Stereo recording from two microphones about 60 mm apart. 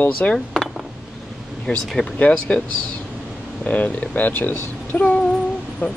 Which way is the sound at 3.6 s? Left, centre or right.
Left.